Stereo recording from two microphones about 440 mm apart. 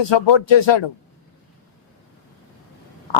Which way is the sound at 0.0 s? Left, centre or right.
Left.